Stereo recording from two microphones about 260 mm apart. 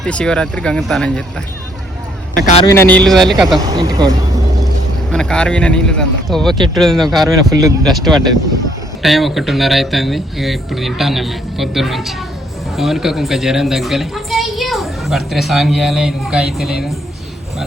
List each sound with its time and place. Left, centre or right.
0.0 s a woman's voice: centre
2.3 s speech: left
2.6 s a woman's voice: centre
3.6 s speech: centre
5.1 s a woman's voice: centre